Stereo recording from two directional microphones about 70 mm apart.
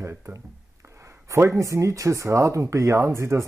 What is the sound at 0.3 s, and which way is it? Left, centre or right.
Speech, right.